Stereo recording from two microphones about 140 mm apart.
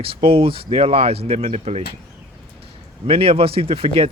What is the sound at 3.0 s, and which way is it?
Speech, 40° right (ahead or behind).